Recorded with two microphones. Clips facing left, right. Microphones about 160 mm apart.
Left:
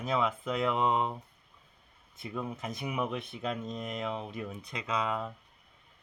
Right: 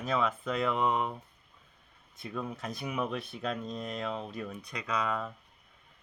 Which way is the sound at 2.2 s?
20° left (ahead or behind).